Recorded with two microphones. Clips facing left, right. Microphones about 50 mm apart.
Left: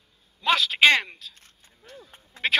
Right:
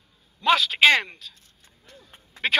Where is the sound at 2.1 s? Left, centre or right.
Centre.